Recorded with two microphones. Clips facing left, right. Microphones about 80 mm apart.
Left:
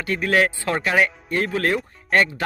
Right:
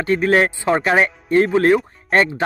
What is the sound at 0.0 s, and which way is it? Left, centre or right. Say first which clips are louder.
Speech: right 4 dB; right.